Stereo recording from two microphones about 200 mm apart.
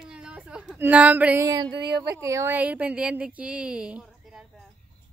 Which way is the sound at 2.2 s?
15° right (ahead or behind).